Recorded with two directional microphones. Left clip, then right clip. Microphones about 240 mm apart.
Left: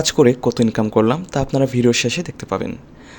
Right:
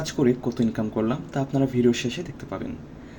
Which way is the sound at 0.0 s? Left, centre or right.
Left.